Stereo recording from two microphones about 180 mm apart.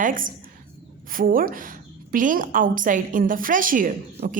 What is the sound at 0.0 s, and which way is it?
A woman's voice, 50° right (ahead or behind).